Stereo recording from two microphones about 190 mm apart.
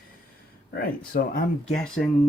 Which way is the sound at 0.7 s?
50° left (ahead or behind).